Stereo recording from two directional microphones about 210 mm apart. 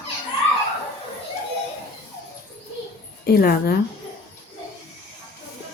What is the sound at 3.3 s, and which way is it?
Speech, 45° left (ahead or behind).